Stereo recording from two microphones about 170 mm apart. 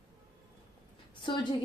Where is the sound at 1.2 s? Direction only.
25° left (ahead or behind).